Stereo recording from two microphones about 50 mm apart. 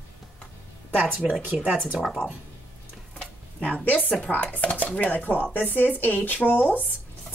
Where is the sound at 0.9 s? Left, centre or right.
Right.